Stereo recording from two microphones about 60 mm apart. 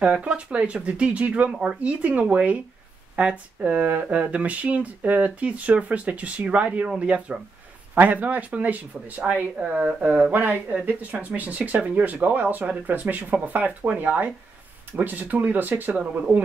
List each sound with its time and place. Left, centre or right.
0.0 s speech: right